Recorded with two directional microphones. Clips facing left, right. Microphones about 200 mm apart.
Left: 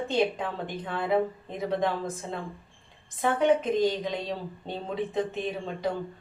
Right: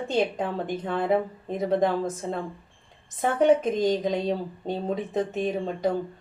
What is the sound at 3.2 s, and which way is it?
A woman's voice, 45° right (ahead or behind).